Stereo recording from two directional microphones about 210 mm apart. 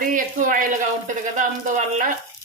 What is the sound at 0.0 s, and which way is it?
Speech, 40° right (ahead or behind).